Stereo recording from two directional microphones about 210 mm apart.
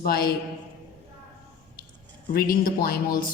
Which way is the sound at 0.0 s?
45° left (ahead or behind).